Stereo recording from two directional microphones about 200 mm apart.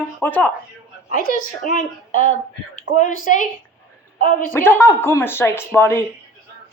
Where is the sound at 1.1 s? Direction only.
45° left (ahead or behind).